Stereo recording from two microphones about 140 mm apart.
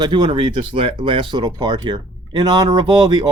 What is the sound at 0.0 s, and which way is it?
Speech, 35° right (ahead or behind).